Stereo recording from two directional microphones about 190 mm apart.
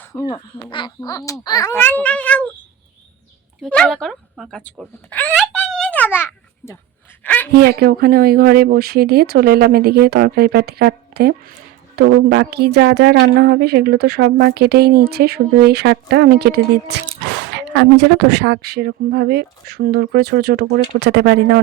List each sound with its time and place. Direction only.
0.0 s a child's voice: 15° left (ahead or behind)
0.5 s a child's voice: 25° left (ahead or behind); by 2.4 s 5° left (ahead or behind)
3.6 s a child's voice: 5° left (ahead or behind)
7.5 s a woman's voice: 55° right (ahead or behind)